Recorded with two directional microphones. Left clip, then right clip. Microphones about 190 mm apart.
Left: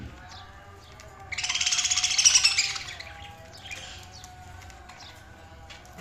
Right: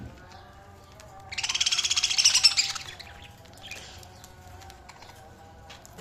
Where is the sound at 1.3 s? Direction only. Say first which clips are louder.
Even; 40° right (ahead or behind).